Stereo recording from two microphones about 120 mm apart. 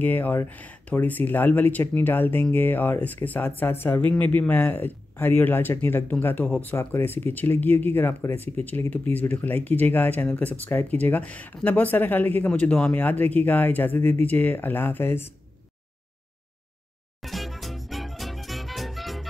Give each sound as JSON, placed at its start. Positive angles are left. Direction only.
{"t": 0.0, "sound": "speech", "side_deg": 15}
{"t": 17.2, "sound": "music", "side_deg": 0}